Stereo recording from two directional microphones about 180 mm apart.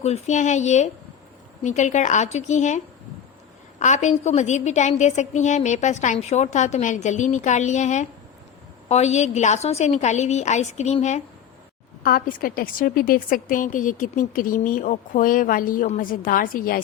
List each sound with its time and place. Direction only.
0.0 s a woman's voice: 40° left (ahead or behind)
12.0 s a woman's voice: 55° left (ahead or behind)